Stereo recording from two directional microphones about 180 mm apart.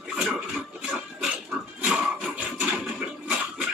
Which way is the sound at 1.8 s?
5° right (ahead or behind).